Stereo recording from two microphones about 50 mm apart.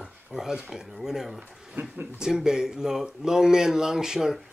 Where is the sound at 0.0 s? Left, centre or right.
Centre.